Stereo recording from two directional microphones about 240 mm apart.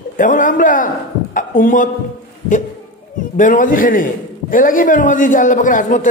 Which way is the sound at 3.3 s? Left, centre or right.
Left.